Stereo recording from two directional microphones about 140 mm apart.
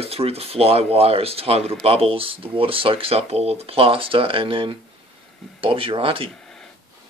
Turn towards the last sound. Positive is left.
turn(degrees=-40)  # may be behind; listen again after turning